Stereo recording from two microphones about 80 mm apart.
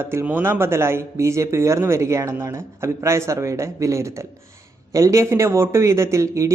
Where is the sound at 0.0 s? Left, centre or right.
Right.